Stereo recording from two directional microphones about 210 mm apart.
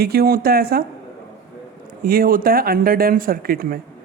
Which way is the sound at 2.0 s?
45° right (ahead or behind).